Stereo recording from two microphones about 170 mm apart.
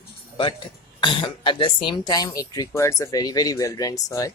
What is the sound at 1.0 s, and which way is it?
Speech, 30° left (ahead or behind).